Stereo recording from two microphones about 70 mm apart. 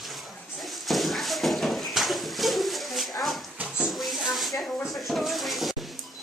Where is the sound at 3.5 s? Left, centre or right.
Centre.